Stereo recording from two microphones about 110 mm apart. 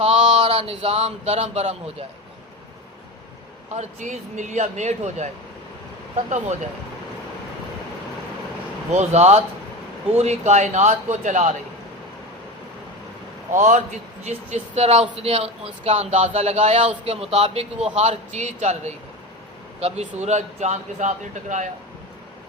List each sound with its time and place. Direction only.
0.0 s speech: 70° right (ahead or behind)
3.8 s speech: 90° right
8.9 s speech: 90° right
13.6 s speech: 90° right; by 17.8 s 65° right (ahead or behind)
17.9 s speech: 85° right